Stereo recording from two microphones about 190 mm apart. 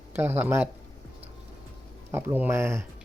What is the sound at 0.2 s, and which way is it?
Speech, 10° right (ahead or behind).